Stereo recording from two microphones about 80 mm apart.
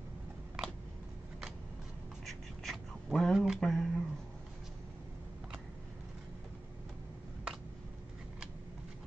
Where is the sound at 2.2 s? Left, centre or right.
Centre.